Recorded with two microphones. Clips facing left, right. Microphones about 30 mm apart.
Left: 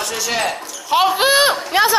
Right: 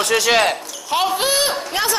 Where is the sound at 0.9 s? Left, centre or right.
Centre.